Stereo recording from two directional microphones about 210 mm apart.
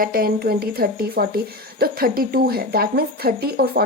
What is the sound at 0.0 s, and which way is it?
Speech, 45° right (ahead or behind).